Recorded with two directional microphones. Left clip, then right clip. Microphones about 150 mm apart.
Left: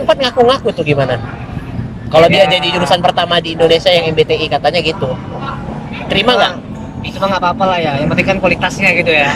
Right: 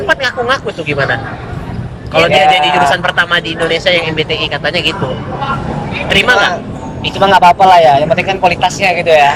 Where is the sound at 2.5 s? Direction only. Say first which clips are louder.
Right 4 dB; 35° left (ahead or behind).